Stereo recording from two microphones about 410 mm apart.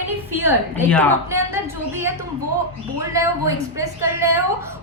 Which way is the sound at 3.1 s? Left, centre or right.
Centre.